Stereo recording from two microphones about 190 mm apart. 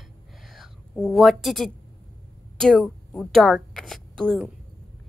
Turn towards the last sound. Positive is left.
turn(degrees=5)  # may be behind; listen again after turning